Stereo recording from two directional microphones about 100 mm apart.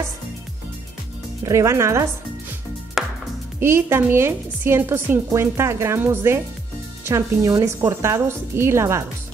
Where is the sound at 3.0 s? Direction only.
5° right (ahead or behind).